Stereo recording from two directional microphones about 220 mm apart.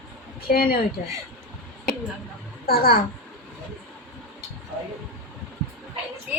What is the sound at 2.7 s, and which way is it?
Speech, 45° left (ahead or behind).